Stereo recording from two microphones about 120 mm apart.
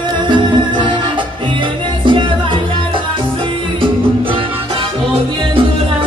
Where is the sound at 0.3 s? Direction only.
40° right (ahead or behind).